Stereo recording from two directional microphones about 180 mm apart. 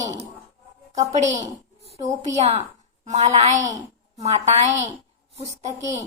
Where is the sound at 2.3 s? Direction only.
35° right (ahead or behind).